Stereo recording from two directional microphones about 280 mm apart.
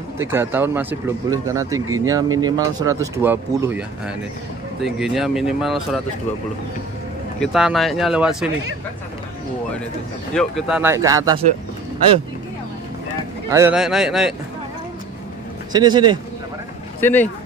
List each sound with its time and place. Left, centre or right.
0.2 s speech: centre
7.3 s speech: centre
10.3 s speech: centre
13.5 s speech: centre
15.7 s speech: centre
17.0 s speech: centre